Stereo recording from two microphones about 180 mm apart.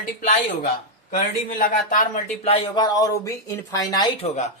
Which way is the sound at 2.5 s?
25° left (ahead or behind).